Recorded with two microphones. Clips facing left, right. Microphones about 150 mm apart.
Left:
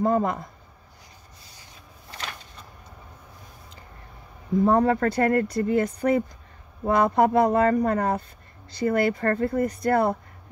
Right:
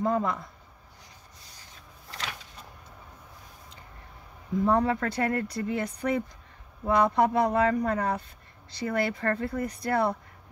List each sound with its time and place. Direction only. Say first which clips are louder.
0.0 s speech: left 4 dB; 45° left (ahead or behind)
4.6 s speech: left 4 dB; 45° left (ahead or behind)